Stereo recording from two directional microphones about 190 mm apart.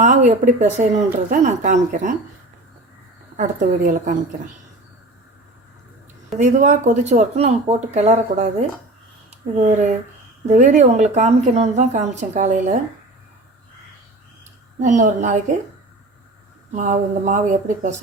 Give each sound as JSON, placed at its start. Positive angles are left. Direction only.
{"t": 0.0, "sound": "a woman's voice", "side_deg": -40}
{"t": 3.3, "sound": "a woman's voice", "side_deg": -40}
{"t": 6.4, "sound": "a woman's voice", "side_deg": -40}
{"t": 14.8, "sound": "a woman's voice", "side_deg": -40}
{"t": 16.7, "sound": "a woman's voice", "side_deg": -40}